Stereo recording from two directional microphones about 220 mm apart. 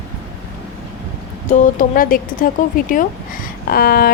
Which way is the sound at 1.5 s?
40° left (ahead or behind).